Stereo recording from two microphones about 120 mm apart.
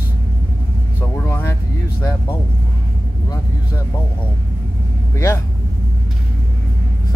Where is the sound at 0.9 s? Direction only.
20° left (ahead or behind).